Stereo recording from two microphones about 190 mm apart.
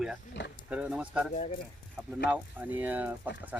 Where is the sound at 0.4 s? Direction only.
65° left (ahead or behind).